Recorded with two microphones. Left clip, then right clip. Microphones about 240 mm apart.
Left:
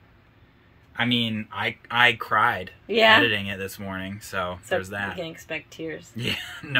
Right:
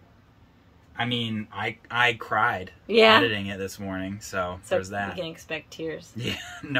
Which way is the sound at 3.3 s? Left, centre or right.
Centre.